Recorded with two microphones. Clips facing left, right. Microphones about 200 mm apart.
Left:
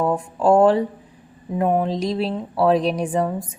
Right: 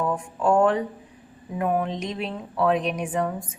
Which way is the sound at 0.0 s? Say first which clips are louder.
Left 5 dB; 35° left (ahead or behind).